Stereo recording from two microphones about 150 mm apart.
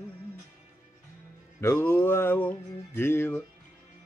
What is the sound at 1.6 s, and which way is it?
Music, 15° left (ahead or behind).